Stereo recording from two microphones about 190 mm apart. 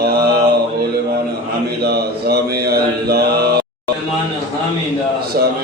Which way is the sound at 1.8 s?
55° right (ahead or behind).